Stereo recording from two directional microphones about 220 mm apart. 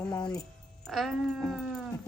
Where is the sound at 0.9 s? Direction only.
Centre (ahead or behind).